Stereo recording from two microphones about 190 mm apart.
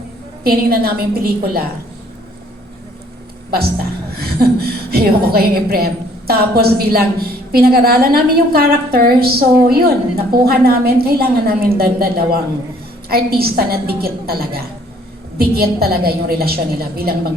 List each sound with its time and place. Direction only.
0.4 s a woman's voice: 55° right (ahead or behind)
3.5 s a woman's voice: 55° right (ahead or behind)